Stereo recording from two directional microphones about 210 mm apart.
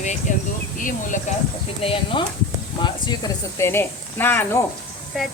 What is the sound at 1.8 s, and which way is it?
Speech, 25° left (ahead or behind).